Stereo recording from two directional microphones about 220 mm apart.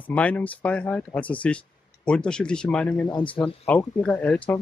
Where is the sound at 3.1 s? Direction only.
20° left (ahead or behind).